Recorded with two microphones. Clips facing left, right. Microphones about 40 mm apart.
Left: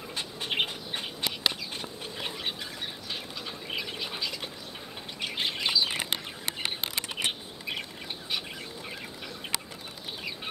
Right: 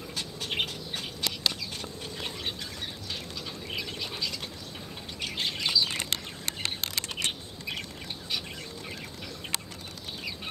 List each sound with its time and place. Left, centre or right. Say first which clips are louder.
0.1 s bird: left 2 dB; left
3.7 s a sound: left 1 dB; centre
5.2 s bird: left 1 dB; centre